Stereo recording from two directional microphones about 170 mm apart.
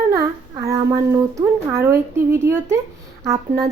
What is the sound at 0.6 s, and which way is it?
A woman's voice, 20° right (ahead or behind).